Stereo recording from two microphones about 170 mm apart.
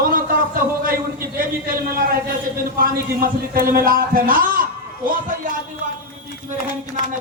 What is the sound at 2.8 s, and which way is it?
A man's voice, 55° right (ahead or behind).